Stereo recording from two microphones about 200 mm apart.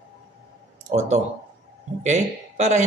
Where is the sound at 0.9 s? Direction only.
35° right (ahead or behind).